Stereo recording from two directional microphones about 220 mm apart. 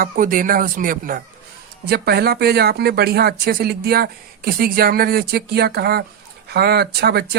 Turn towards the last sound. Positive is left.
turn(degrees=-45)  # may be behind; listen again after turning